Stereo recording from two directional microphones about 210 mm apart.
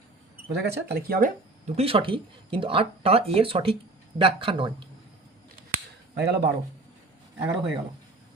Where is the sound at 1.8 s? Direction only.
25° right (ahead or behind).